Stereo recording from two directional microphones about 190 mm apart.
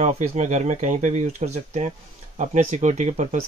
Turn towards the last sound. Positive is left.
turn(degrees=-35)  # may be behind; listen again after turning